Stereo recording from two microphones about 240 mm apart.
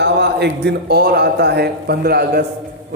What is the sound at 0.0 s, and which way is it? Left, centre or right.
A man's voice, right.